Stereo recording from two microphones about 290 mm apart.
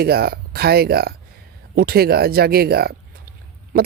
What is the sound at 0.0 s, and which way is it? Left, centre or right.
Speech, right.